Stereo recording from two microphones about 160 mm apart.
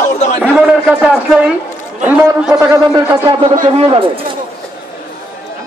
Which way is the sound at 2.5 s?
20° right (ahead or behind).